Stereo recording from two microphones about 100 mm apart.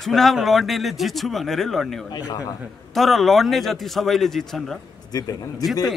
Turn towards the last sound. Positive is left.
turn(degrees=40)  # may be behind; listen again after turning